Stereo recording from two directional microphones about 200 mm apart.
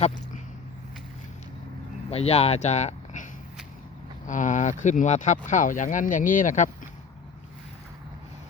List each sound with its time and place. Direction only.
2.0 s speech: 30° left (ahead or behind)
4.3 s speech: 40° left (ahead or behind)